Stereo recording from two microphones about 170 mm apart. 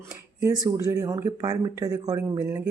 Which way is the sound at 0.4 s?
20° right (ahead or behind).